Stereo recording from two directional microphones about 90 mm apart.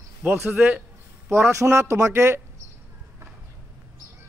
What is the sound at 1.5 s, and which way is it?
Speech, 35° right (ahead or behind).